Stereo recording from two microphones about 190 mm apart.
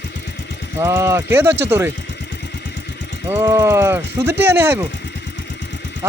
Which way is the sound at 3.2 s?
15° right (ahead or behind).